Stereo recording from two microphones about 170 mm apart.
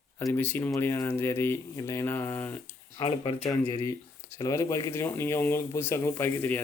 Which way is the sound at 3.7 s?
20° left (ahead or behind).